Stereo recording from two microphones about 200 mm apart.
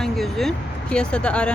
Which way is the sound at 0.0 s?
Centre (ahead or behind).